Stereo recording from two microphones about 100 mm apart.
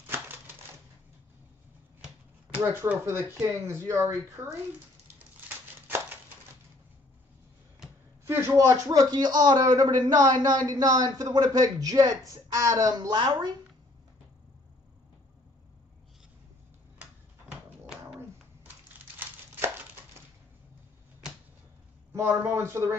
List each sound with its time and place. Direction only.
0.0 s typewriter: 20° right (ahead or behind)
2.6 s a man's voice: 25° right (ahead or behind)
5.9 s a sound: 20° right (ahead or behind)
8.3 s a man's voice: 25° right (ahead or behind); by 13.5 s 50° right (ahead or behind)
17.0 s a sound: 10° right (ahead or behind)
19.1 s crumpling: 20° right (ahead or behind)
22.1 s speech: 25° right (ahead or behind)